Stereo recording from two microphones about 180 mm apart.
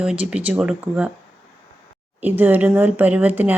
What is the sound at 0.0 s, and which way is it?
Speech, 5° right (ahead or behind).